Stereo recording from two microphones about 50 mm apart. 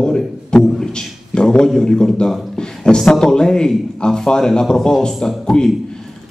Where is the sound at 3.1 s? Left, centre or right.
Centre.